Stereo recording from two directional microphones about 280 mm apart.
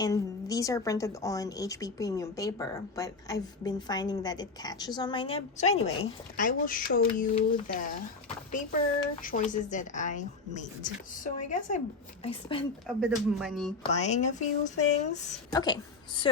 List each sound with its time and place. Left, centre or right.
0.0 s a woman's voice: centre
9.2 s speech: left
13.0 s speech: centre
13.9 s speech: left
15.5 s a woman's voice: centre